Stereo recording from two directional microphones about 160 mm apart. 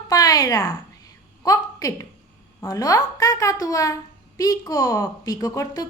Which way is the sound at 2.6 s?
20° left (ahead or behind).